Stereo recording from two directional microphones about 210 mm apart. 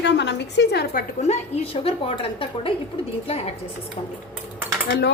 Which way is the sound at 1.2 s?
30° left (ahead or behind).